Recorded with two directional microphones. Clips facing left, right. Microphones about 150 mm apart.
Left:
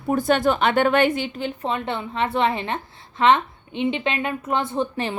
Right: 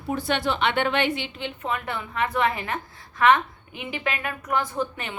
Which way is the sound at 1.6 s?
25° left (ahead or behind).